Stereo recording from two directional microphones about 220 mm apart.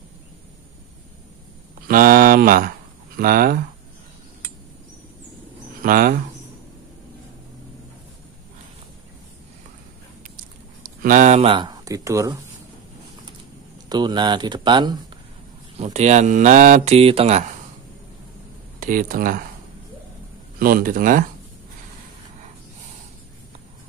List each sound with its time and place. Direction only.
1.9 s speech: 40° right (ahead or behind)
5.8 s speech: 40° right (ahead or behind)
11.0 s speech: 35° right (ahead or behind); by 12.4 s 15° right (ahead or behind)
13.8 s speech: 20° right (ahead or behind)
15.8 s speech: 30° right (ahead or behind)
18.8 s speech: 40° right (ahead or behind)
20.5 s speech: 40° right (ahead or behind)